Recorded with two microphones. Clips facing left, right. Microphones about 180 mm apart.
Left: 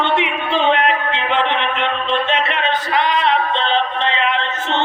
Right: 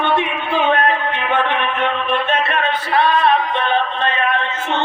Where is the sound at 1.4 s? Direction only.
20° left (ahead or behind).